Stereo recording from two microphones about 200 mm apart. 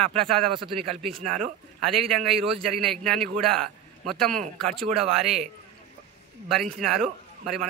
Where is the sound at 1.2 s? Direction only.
40° right (ahead or behind).